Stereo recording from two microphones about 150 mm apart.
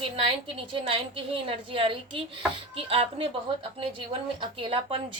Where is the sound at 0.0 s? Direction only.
35° right (ahead or behind).